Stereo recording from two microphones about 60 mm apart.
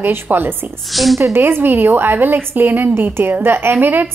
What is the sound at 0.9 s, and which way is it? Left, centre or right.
Speech, centre.